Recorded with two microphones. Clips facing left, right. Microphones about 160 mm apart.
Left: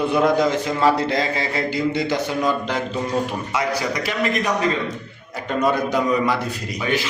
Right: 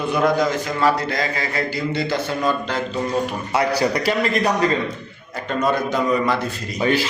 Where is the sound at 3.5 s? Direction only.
35° right (ahead or behind).